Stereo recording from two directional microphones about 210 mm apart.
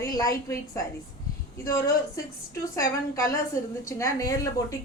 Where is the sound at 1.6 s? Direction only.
15° left (ahead or behind).